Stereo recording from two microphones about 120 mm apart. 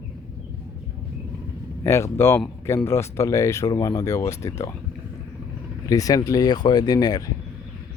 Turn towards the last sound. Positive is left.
turn(degrees=35)  # may be behind; listen again after turning